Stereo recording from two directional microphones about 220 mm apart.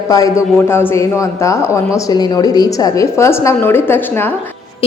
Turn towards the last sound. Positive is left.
turn(degrees=10)  # may be behind; listen again after turning